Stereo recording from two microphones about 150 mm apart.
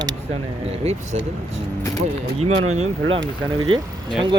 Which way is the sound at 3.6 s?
30° right (ahead or behind).